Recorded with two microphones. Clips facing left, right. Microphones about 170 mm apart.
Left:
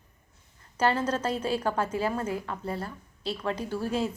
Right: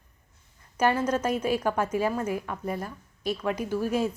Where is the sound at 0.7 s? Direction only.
10° right (ahead or behind).